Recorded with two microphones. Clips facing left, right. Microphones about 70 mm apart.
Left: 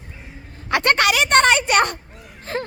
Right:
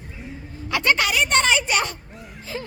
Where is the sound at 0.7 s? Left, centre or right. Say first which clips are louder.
Left 3 dB; left.